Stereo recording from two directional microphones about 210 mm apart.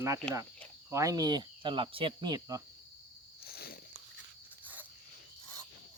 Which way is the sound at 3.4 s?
45° left (ahead or behind).